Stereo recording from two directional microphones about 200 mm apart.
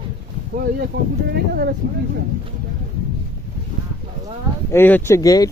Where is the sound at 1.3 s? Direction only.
50° right (ahead or behind).